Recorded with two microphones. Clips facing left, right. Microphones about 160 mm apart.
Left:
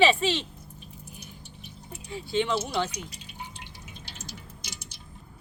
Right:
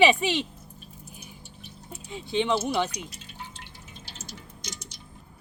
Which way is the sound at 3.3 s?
15° left (ahead or behind).